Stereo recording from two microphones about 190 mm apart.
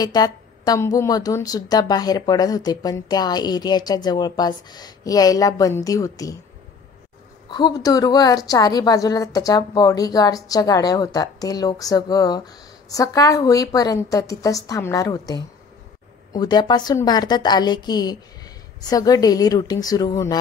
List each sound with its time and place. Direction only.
0.0 s a woman's voice: 20° left (ahead or behind)
7.4 s a woman's voice: 20° left (ahead or behind)